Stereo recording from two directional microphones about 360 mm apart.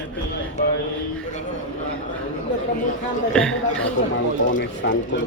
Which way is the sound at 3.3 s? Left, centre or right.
Centre.